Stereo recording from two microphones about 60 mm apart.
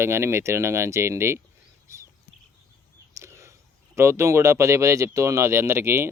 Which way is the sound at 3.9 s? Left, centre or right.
Right.